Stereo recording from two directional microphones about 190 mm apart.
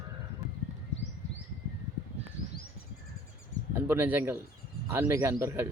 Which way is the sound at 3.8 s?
10° right (ahead or behind).